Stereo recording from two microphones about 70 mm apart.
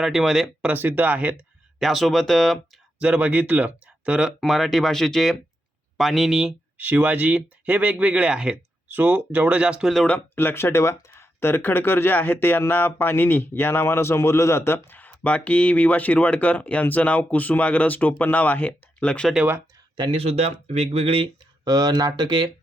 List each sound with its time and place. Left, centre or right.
0.0 s speech: centre
0.6 s speech: right
1.8 s speech: centre
3.0 s speech: centre
4.4 s speech: centre
6.7 s speech: right
8.9 s speech: right
10.3 s speech: left; by 19.3 s centre
21.6 s speech: right